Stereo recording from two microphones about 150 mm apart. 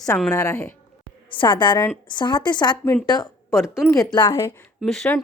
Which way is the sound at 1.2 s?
35° left (ahead or behind).